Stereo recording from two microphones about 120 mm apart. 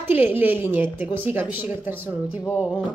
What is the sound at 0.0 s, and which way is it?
A woman's voice, 15° right (ahead or behind).